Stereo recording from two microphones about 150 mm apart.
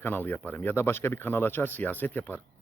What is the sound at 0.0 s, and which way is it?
Speech, 15° left (ahead or behind).